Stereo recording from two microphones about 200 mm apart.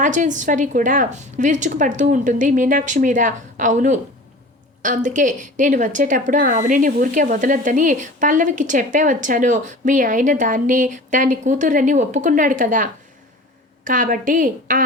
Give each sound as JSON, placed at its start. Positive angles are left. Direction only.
{"t": 0.0, "sound": "speech", "side_deg": -40}